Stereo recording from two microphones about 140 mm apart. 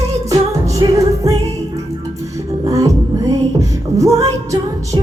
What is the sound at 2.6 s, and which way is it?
Music, 25° right (ahead or behind).